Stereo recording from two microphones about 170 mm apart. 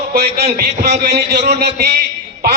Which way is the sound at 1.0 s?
70° right (ahead or behind).